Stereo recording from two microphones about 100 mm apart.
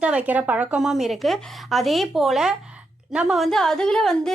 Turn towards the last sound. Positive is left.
turn(degrees=5)  # may be behind; listen again after turning